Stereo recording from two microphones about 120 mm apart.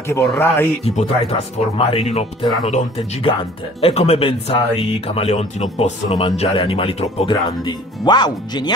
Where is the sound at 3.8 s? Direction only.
60° left (ahead or behind).